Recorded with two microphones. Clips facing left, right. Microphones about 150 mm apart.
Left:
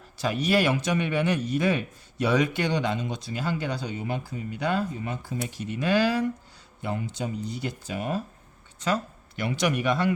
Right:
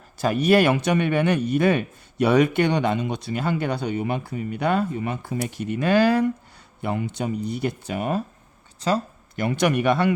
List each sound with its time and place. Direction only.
0.2 s a man's voice: 50° right (ahead or behind)
8.8 s speech: 40° right (ahead or behind); by 10.1 s 60° right (ahead or behind)